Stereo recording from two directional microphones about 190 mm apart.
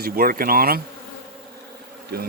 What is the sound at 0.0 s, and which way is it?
Speech, 50° right (ahead or behind).